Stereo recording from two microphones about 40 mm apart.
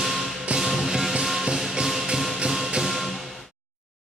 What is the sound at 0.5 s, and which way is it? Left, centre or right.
Music, centre.